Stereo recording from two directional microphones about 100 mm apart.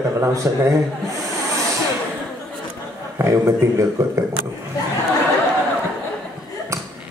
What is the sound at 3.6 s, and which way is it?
Speech, 30° right (ahead or behind).